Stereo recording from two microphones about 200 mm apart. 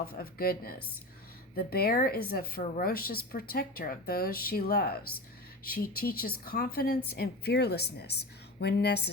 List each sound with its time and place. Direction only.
0.0 s a woman's voice: 50° left (ahead or behind)